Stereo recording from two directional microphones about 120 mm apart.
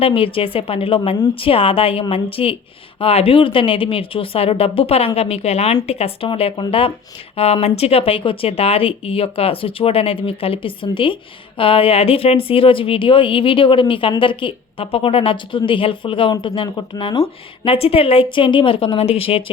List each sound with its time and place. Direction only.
0.0 s speech: 50° left (ahead or behind)